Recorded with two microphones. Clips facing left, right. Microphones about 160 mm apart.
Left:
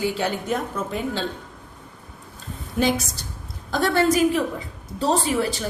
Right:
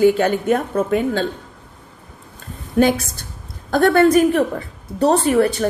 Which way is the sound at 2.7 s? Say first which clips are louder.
Right 6 dB; 55° right (ahead or behind).